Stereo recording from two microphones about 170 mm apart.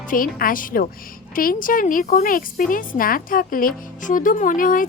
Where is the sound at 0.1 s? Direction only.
55° left (ahead or behind).